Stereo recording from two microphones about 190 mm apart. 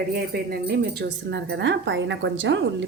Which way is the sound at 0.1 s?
50° right (ahead or behind).